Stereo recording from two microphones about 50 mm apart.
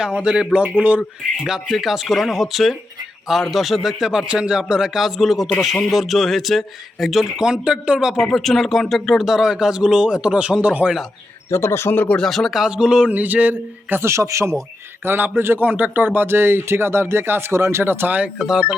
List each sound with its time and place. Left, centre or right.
0.0 s speech: centre
1.5 s speech: centre
8.3 s speech: centre; by 10.9 s right
11.5 s speech: left
12.1 s speech: centre
12.6 s speech: centre
13.1 s a man's voice: right
14.0 s speech: right
15.0 s speech: right
15.6 s speech: right
17.8 s speech: right
18.3 s speech: centre